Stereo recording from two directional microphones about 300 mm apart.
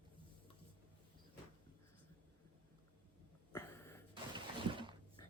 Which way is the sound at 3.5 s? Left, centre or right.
Centre.